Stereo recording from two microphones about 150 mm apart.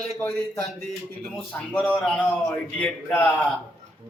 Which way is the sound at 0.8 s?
Centre (ahead or behind).